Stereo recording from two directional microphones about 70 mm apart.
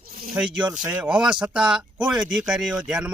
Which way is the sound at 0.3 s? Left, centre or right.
Centre.